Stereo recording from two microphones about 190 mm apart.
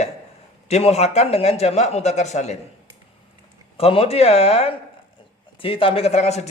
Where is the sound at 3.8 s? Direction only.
30° left (ahead or behind).